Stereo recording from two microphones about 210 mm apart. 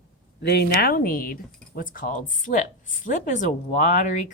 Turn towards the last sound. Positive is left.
turn(degrees=35)  # may be behind; listen again after turning